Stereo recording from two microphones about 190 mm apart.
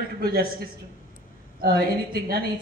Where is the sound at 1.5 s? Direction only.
50° right (ahead or behind).